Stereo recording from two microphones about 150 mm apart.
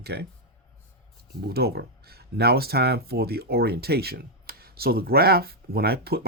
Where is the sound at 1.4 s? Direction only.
90° right.